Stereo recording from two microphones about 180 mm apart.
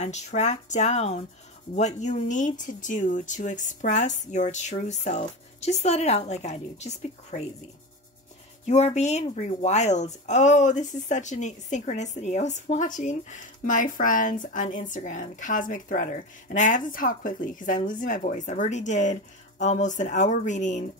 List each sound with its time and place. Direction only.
0.0 s speech: 40° left (ahead or behind)
8.6 s speech: 40° left (ahead or behind)